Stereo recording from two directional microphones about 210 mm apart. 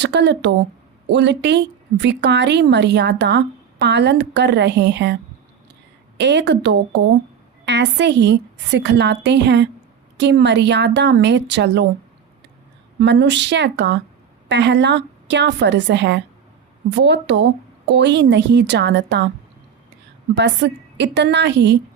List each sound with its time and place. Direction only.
0.0 s a woman's voice: 55° right (ahead or behind)
6.1 s a woman's voice: 55° right (ahead or behind)
13.0 s a woman's voice: 55° right (ahead or behind)
20.3 s a woman's voice: 55° right (ahead or behind)